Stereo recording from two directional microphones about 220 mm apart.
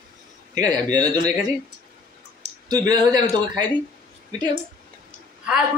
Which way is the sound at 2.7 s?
20° right (ahead or behind).